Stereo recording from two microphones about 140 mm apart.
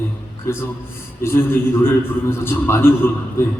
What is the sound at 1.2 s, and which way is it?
A man's voice, 15° left (ahead or behind).